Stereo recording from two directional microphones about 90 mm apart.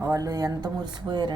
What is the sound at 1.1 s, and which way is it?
Speech, 55° right (ahead or behind).